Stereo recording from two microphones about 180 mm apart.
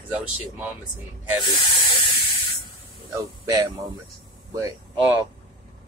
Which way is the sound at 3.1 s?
15° right (ahead or behind).